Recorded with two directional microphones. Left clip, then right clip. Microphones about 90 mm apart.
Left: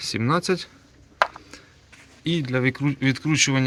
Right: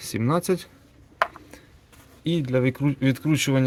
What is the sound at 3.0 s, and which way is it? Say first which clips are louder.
Speech: left 4 dB; 45° right (ahead or behind).